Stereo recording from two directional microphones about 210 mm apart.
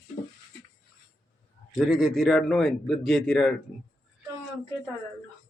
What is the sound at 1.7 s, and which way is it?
A man's voice, centre (ahead or behind).